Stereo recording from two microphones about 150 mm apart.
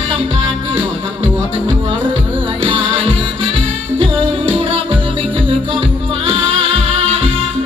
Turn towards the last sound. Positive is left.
turn(degrees=-40)  # may be behind; listen again after turning